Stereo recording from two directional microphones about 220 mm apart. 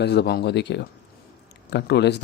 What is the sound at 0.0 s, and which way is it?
Speech, 50° left (ahead or behind).